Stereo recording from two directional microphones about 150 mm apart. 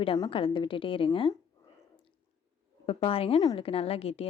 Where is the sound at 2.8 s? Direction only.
40° left (ahead or behind).